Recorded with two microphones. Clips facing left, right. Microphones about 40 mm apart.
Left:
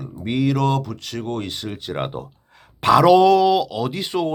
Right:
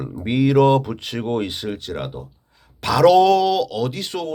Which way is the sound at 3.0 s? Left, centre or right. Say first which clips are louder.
Right 2 dB; centre.